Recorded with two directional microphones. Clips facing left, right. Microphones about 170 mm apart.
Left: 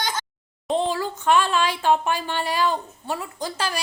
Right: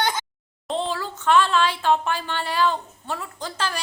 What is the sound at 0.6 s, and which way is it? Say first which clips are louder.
A woman's voice: left 3 dB; 15° left (ahead or behind).